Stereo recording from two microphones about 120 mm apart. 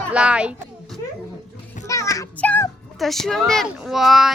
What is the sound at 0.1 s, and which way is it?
Speech, 10° right (ahead or behind).